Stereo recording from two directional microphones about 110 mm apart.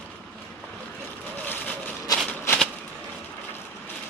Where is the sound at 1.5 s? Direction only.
10° left (ahead or behind).